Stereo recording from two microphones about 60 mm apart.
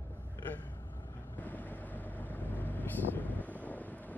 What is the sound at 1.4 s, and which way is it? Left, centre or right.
Vehicle, left.